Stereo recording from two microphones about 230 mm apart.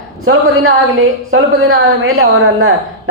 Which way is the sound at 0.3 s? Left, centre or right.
Right.